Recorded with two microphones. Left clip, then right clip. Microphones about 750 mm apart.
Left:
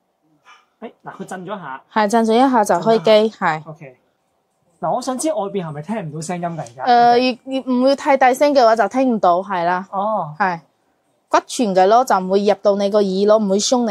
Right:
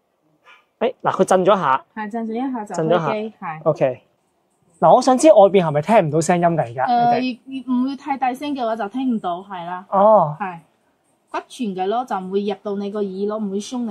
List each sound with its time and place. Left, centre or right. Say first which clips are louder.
0.7 s speech: right 16 dB; right
2.0 s a woman's voice: left 12 dB; left
4.7 s speech: right 8 dB; right
6.8 s a woman's voice: left 6 dB; left
9.8 s speech: right 7 dB; right
11.3 s a woman's voice: left 11 dB; left